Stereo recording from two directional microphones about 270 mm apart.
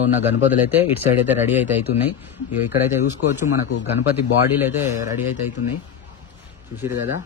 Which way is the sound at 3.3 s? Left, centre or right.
Centre.